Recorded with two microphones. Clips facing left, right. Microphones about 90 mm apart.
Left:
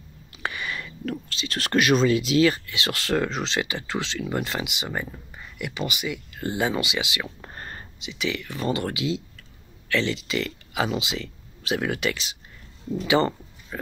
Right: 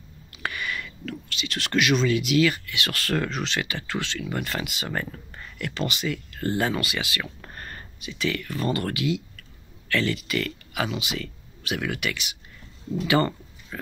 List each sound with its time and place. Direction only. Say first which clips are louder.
0.3 s speech: even; 25° left (ahead or behind)
13.0 s speech: left 1 dB; 20° left (ahead or behind)